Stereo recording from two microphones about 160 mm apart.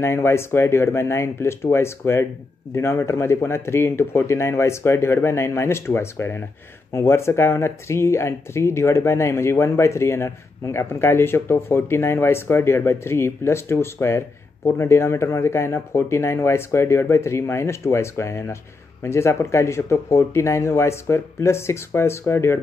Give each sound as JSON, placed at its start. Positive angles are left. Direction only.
{"t": 0.0, "sound": "speech", "side_deg": 15}